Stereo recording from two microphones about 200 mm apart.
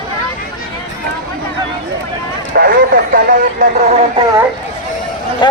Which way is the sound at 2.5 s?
45° right (ahead or behind).